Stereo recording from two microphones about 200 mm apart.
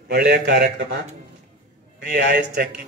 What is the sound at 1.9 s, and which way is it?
Speech, 55° right (ahead or behind).